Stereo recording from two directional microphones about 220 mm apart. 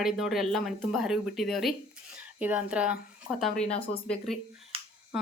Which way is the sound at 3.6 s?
25° left (ahead or behind).